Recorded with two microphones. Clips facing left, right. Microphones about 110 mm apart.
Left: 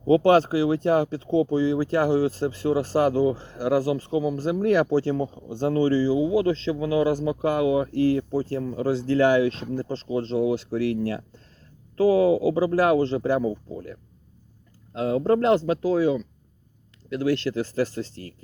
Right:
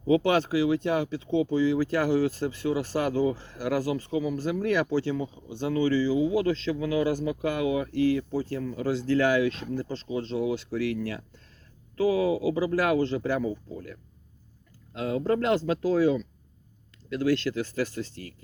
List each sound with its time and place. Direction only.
0.1 s speech: 35° left (ahead or behind)